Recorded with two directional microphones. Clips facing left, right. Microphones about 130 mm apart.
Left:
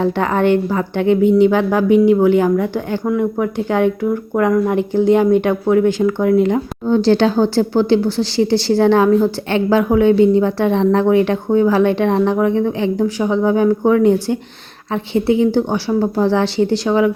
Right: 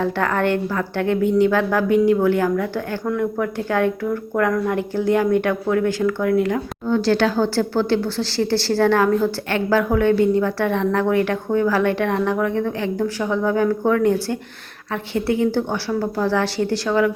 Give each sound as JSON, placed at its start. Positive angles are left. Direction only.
{"t": 0.0, "sound": "a woman's voice", "side_deg": 20}